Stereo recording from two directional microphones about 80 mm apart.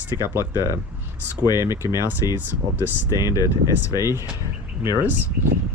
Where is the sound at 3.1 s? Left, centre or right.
Left.